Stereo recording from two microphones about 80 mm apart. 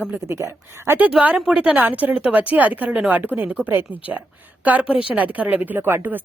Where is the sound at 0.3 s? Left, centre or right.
Right.